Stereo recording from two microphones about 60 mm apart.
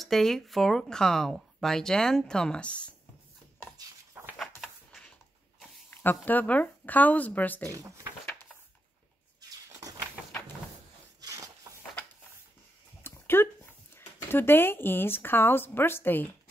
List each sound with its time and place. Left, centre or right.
0.0 s speech: centre
5.9 s speech: left
7.7 s speech: right
9.4 s vehicle: right
11.1 s a sound: right
13.0 s a sound: left
13.9 s speech: left